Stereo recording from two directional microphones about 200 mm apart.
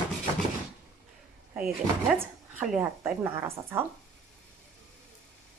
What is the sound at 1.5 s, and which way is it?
Speech, 5° right (ahead or behind).